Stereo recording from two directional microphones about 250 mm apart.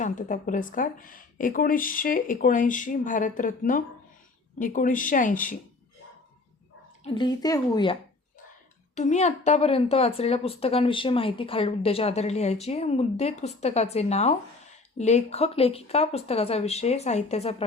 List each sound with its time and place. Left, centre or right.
0.0 s speech: left
7.0 s speech: centre
9.0 s a woman's voice: left